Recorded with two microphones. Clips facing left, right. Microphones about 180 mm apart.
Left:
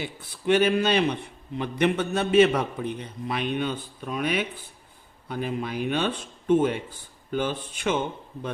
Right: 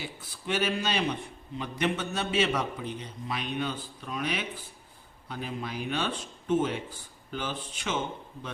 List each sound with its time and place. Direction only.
0.0 s a man's voice: 60° left (ahead or behind)